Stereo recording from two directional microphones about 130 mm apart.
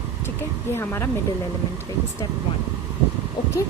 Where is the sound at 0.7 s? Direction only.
20° left (ahead or behind).